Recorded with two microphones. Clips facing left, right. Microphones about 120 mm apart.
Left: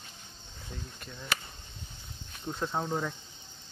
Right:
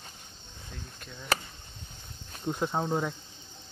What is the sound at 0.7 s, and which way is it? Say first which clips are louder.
Speech: left 1 dB; centre (ahead or behind).